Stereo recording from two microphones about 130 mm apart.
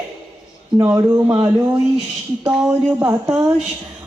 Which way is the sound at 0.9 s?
20° right (ahead or behind).